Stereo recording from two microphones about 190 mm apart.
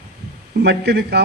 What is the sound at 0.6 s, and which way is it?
Speech, 60° right (ahead or behind).